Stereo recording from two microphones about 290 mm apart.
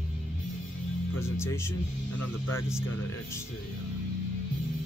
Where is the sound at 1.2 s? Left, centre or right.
Centre.